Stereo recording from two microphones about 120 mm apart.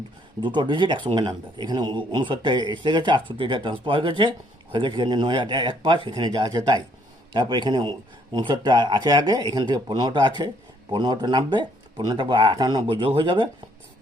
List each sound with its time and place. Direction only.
0.4 s speech: 40° right (ahead or behind)